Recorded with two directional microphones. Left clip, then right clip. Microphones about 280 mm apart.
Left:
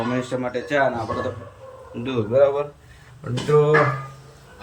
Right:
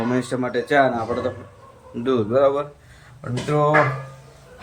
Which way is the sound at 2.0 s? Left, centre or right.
Centre.